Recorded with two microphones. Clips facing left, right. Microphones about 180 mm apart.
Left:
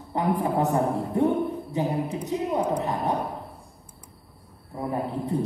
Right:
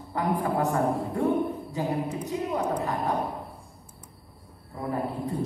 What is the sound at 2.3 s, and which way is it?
Speech, 20° left (ahead or behind).